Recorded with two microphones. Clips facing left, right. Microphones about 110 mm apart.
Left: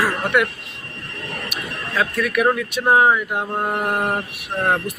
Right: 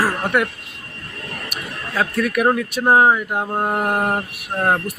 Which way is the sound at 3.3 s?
5° right (ahead or behind).